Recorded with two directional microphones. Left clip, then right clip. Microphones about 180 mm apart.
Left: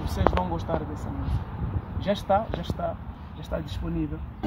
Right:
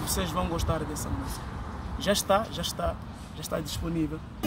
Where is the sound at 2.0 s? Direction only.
10° right (ahead or behind).